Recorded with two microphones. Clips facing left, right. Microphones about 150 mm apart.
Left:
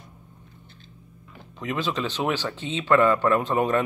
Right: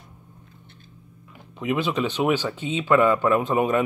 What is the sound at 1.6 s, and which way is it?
Speech, 10° right (ahead or behind).